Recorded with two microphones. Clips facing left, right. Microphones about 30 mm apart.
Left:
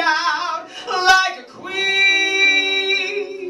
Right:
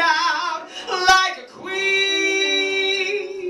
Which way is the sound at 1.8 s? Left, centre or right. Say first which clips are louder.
Left 4 dB; left.